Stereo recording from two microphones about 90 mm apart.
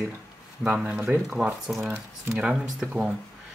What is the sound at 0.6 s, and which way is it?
Speech, 15° right (ahead or behind).